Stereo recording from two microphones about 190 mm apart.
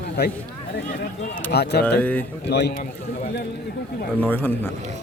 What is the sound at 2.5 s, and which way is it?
Speech, 60° left (ahead or behind).